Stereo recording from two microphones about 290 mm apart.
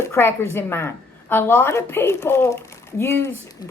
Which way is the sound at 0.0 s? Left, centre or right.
Centre.